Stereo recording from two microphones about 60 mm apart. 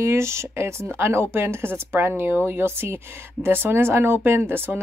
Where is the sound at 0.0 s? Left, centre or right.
Right.